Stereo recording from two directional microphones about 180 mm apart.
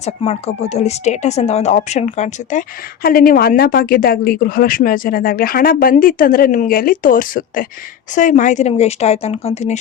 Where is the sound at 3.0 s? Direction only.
55° left (ahead or behind); by 9.8 s 35° left (ahead or behind).